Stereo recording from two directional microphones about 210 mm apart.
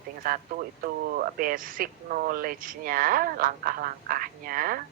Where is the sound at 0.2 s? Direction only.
45° right (ahead or behind).